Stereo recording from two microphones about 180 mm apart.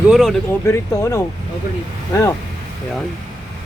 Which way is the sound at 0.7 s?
20° left (ahead or behind).